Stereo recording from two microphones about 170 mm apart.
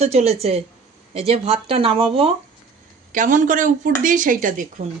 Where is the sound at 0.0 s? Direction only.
40° right (ahead or behind).